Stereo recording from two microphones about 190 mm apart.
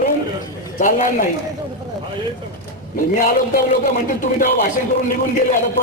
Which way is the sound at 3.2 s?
45° left (ahead or behind).